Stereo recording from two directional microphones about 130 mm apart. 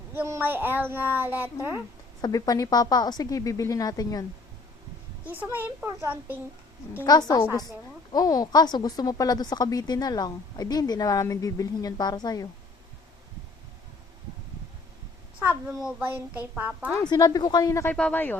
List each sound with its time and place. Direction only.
0.1 s a child's voice: 15° right (ahead or behind)
2.2 s a woman's voice: 30° left (ahead or behind)
5.2 s a child's voice: 15° right (ahead or behind)
7.0 s a woman's voice: 30° left (ahead or behind)
15.4 s a child's voice: 15° right (ahead or behind)
16.9 s a woman's voice: 30° left (ahead or behind)
17.9 s speech: 10° left (ahead or behind)